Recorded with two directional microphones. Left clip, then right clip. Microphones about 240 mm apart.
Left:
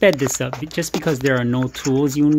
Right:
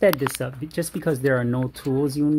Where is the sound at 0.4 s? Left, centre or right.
Centre.